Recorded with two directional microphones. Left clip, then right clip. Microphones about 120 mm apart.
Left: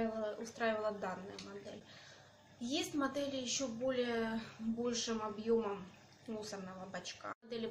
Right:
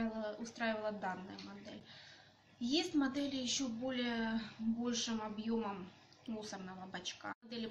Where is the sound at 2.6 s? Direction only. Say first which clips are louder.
Right 2 dB; 20° left (ahead or behind).